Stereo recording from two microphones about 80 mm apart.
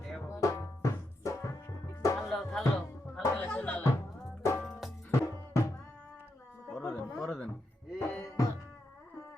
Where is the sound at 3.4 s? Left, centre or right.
Centre.